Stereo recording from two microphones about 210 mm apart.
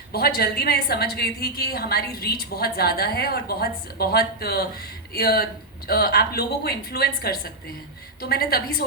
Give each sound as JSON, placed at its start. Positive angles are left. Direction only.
{"t": 0.1, "sound": "a woman's voice", "side_deg": 45}